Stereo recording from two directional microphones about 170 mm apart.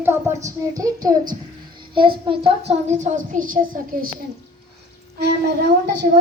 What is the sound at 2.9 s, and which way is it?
A woman's voice, 45° right (ahead or behind).